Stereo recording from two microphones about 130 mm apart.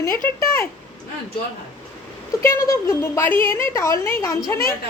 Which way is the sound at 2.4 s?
20° left (ahead or behind).